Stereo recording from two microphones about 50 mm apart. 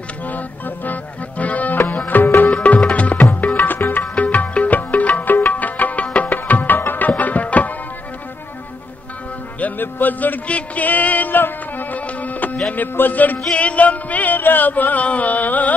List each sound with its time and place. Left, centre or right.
0.3 s music: left
2.5 s music: left
3.5 s music: left
4.1 s music: left
7.1 s tabla: left
9.6 s music: left